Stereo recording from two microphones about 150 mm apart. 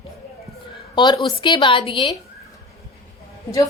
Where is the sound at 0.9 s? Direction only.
30° left (ahead or behind).